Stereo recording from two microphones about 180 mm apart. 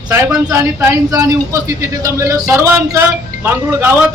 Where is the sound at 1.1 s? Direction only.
20° right (ahead or behind).